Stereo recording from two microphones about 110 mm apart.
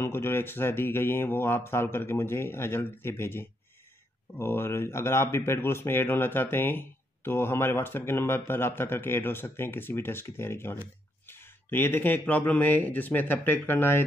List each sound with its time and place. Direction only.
0.0 s speech: 20° left (ahead or behind)